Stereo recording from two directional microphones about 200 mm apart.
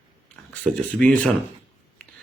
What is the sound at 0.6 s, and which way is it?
Speech, 5° left (ahead or behind).